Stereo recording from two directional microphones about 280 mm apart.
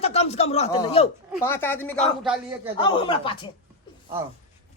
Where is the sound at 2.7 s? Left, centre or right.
Centre.